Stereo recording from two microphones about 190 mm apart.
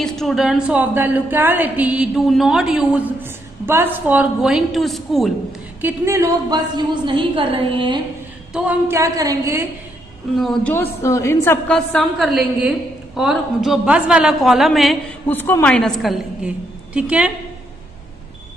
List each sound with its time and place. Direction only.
0.0 s a woman's voice: centre (ahead or behind)
5.8 s a woman's voice: 10° right (ahead or behind)
7.1 s a woman's voice: 25° right (ahead or behind)
8.5 s a woman's voice: 10° right (ahead or behind)
10.3 s a woman's voice: centre (ahead or behind)
10.7 s a man's voice: 15° left (ahead or behind); by 17.3 s 5° right (ahead or behind)